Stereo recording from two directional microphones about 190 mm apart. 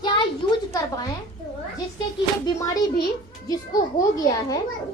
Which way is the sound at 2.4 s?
20° left (ahead or behind).